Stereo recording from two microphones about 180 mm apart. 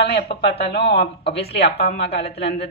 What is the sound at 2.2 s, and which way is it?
Speech, 35° left (ahead or behind).